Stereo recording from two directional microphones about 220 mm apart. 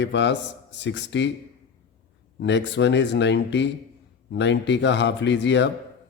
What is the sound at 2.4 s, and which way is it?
A man's voice, 50° left (ahead or behind).